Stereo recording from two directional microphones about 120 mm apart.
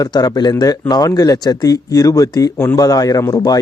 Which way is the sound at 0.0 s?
30° left (ahead or behind).